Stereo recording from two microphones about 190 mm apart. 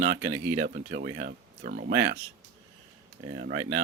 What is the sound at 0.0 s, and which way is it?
Speech, 45° right (ahead or behind).